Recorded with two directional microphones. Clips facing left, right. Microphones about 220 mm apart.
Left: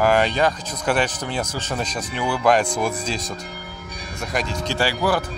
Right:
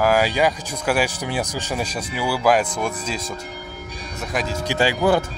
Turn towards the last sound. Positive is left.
turn(degrees=-25)  # may be behind; listen again after turning